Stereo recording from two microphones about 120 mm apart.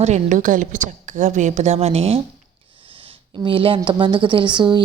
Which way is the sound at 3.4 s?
45° right (ahead or behind).